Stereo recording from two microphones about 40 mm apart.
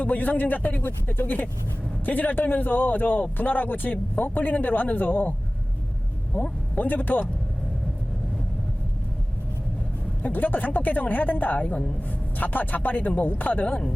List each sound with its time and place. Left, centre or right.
0.0 s a man's voice: left
6.3 s speech: left
10.2 s a man's voice: left
13.7 s speech: left